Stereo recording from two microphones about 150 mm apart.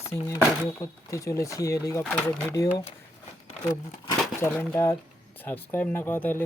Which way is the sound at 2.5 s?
25° left (ahead or behind).